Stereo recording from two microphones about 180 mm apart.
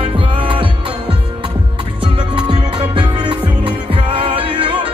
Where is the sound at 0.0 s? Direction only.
30° right (ahead or behind).